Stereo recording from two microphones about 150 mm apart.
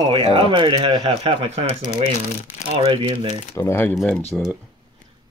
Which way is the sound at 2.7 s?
35° right (ahead or behind).